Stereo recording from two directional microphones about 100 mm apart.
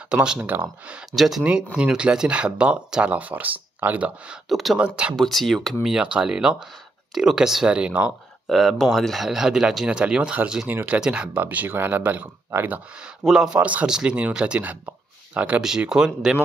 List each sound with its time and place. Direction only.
0.1 s speech: 10° right (ahead or behind)
1.1 s speech: 5° right (ahead or behind)
4.5 s speech: centre (ahead or behind)
4.7 s speech: 10° right (ahead or behind)
5.1 s speech: centre (ahead or behind); by 13.1 s 15° right (ahead or behind)
13.2 s speech: 5° right (ahead or behind)
13.6 s speech: 15° right (ahead or behind)